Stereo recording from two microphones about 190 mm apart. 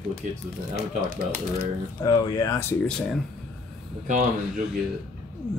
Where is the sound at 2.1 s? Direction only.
20° left (ahead or behind).